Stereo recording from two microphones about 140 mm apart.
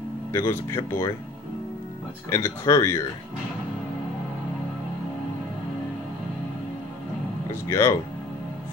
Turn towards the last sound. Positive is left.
turn(degrees=20)  # may be behind; listen again after turning